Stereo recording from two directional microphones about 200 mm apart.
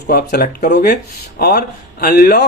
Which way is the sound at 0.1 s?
50° left (ahead or behind).